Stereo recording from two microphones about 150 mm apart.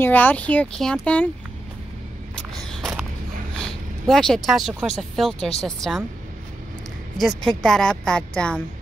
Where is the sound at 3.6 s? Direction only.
5° left (ahead or behind).